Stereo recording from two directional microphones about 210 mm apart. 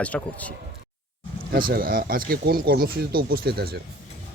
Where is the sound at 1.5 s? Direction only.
45° right (ahead or behind).